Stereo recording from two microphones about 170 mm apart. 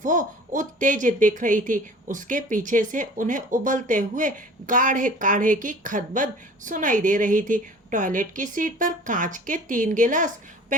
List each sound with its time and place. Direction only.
0.0 s speech: 50° right (ahead or behind)